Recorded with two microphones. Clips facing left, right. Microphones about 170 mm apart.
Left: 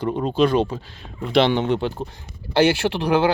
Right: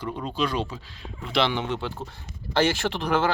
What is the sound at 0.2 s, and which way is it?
Speech, 55° left (ahead or behind).